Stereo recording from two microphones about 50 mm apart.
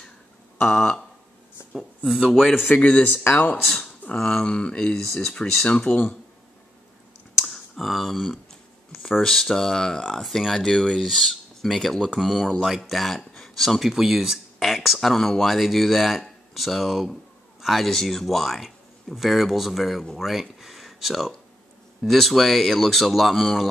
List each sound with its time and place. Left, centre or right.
0.7 s speech: centre
1.6 s a sound: left
2.1 s speech: centre
2.7 s speech: left
3.1 s speech: left
4.1 s speech: centre
7.3 s clicking: centre
9.2 s speech: centre
14.6 s a sound: centre
15.0 s speech: centre